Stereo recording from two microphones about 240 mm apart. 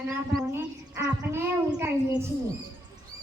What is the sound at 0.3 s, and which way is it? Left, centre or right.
Speech, centre.